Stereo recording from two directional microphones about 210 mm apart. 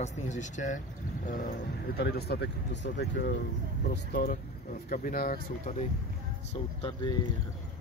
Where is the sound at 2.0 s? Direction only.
50° left (ahead or behind).